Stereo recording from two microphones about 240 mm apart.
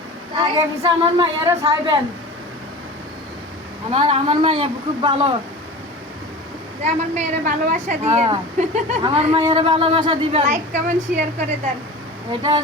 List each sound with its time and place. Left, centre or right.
0.3 s a woman's voice: centre
3.9 s a woman's voice: right
6.8 s a woman's voice: right
12.3 s a woman's voice: centre